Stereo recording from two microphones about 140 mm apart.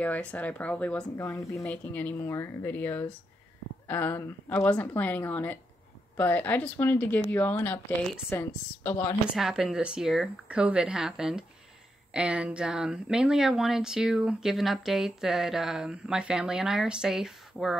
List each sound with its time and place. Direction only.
0.0 s a woman's voice: 10° left (ahead or behind)
9.3 s speech: 5° right (ahead or behind)